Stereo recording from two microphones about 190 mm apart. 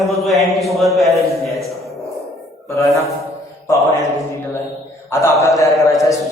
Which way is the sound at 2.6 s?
15° left (ahead or behind).